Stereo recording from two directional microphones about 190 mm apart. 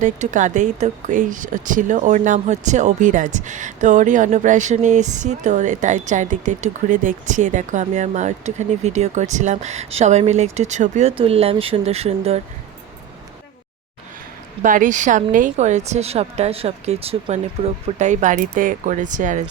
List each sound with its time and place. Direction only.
0.0 s speech: 40° right (ahead or behind)
14.6 s speech: 45° right (ahead or behind)